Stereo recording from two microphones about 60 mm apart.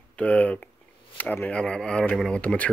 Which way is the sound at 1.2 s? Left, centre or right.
Left.